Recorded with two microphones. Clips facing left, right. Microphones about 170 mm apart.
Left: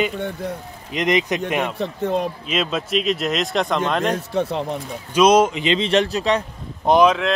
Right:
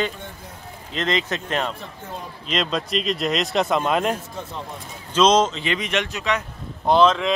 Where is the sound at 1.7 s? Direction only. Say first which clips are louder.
Left 13 dB; 80° left.